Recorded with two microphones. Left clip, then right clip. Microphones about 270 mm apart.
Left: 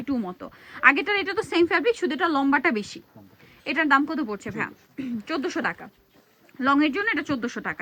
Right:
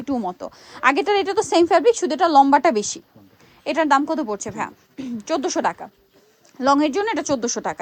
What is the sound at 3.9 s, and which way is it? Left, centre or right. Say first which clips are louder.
Speech: right 3 dB; centre.